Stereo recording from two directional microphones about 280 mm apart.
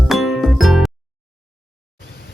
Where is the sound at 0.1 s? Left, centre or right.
Centre.